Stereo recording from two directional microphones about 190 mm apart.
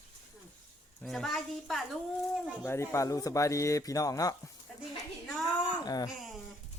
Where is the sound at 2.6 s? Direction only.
15° left (ahead or behind).